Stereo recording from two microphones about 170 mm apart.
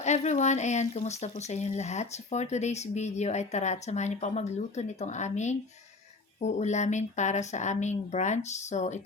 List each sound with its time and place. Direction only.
0.0 s speech: 40° left (ahead or behind)